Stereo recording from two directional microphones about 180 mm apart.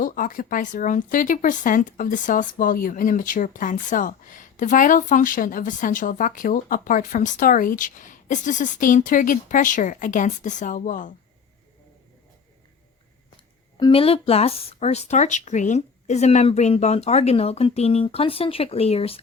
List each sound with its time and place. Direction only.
0.0 s speech: 50° left (ahead or behind)
13.7 s speech: 25° left (ahead or behind)